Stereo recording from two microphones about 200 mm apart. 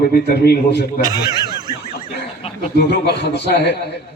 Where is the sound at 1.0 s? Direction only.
20° right (ahead or behind).